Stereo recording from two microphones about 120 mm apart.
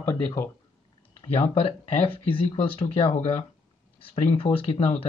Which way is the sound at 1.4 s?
50° left (ahead or behind).